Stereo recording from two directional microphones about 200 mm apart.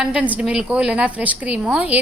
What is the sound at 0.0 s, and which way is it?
A woman's voice, 5° right (ahead or behind).